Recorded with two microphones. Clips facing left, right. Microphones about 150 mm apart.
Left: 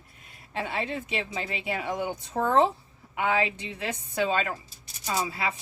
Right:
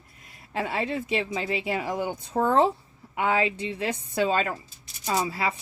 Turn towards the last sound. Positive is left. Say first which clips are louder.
# right 3 dB
turn(degrees=-35)  # may be behind; listen again after turning